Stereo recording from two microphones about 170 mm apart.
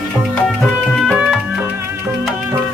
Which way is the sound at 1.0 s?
Centre (ahead or behind).